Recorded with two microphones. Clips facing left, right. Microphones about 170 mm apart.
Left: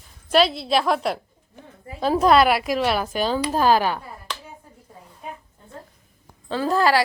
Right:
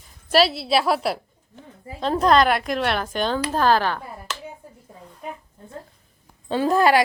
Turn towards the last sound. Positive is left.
turn(degrees=-15)  # may be behind; listen again after turning